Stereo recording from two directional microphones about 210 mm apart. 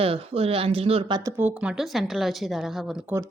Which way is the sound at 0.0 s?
25° right (ahead or behind).